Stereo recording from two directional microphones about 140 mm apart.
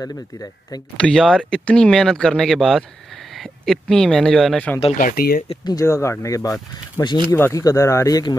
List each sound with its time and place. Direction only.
0.0 s speech: 25° left (ahead or behind)
0.9 s speech: 5° left (ahead or behind)
4.9 s speech: 85° left
5.7 s speech: 20° left (ahead or behind)
7.3 s speech: 15° left (ahead or behind)